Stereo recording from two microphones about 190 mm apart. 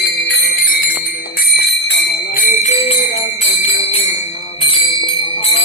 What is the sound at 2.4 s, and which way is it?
Jingle bell, 35° left (ahead or behind).